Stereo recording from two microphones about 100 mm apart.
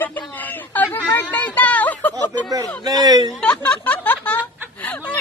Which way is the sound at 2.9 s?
40° right (ahead or behind).